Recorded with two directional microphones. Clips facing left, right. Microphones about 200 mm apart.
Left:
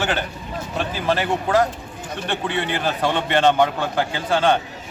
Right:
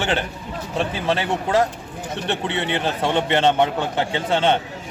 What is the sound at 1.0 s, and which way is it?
A man's voice, 25° right (ahead or behind).